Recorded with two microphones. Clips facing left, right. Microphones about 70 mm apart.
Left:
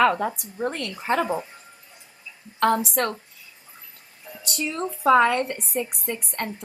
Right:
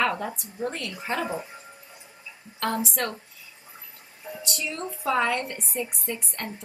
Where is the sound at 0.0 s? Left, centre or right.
Left.